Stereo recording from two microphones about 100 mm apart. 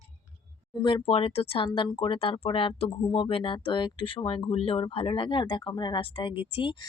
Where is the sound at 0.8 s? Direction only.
50° left (ahead or behind).